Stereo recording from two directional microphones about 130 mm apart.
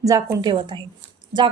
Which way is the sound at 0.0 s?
25° right (ahead or behind).